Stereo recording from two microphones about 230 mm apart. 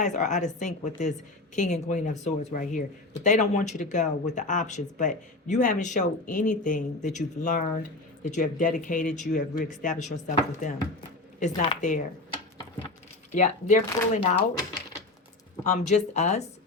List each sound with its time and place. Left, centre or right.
0.0 s speech: left
13.3 s speech: left
15.6 s speech: left